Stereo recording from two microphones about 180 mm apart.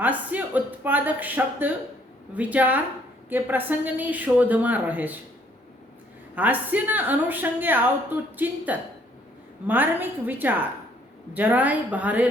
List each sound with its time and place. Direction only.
0.0 s a woman's voice: 10° right (ahead or behind)
6.3 s a woman's voice: 10° right (ahead or behind)